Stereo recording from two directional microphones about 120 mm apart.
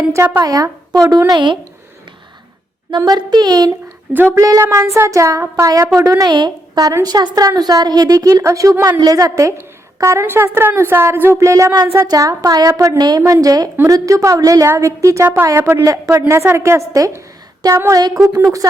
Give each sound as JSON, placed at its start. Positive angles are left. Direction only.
{"t": 0.1, "sound": "speech", "side_deg": -25}
{"t": 1.3, "sound": "a woman's voice", "side_deg": -40}
{"t": 2.9, "sound": "a woman's voice", "side_deg": -40}
{"t": 4.1, "sound": "a woman's voice", "side_deg": -20}